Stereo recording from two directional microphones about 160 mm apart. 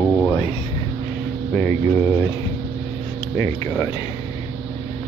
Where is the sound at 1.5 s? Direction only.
10° left (ahead or behind).